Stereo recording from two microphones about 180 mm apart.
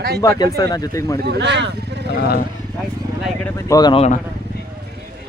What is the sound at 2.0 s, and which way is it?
Speech, 60° left (ahead or behind).